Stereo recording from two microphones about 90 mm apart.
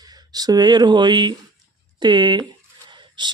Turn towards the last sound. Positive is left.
turn(degrees=-60)  # may be behind; listen again after turning